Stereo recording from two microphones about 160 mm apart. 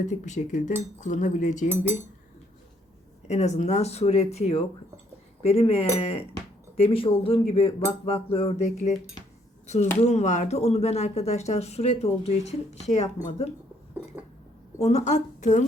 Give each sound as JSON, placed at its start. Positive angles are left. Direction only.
{"t": 0.0, "sound": "speech", "side_deg": 50}
{"t": 3.2, "sound": "speech", "side_deg": 45}
{"t": 14.8, "sound": "speech", "side_deg": 45}